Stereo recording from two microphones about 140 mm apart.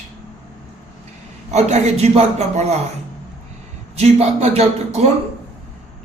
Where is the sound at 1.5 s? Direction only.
50° right (ahead or behind).